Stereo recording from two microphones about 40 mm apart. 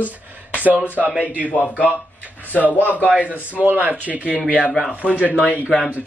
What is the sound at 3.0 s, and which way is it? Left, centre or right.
Speech, right.